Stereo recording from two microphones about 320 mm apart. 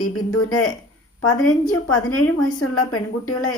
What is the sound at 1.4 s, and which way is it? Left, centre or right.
A woman's voice, left.